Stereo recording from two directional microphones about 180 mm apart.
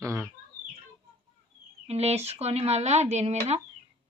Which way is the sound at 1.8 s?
35° right (ahead or behind).